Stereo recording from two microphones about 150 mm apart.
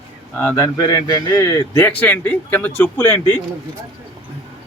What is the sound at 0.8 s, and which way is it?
Speech, 25° left (ahead or behind).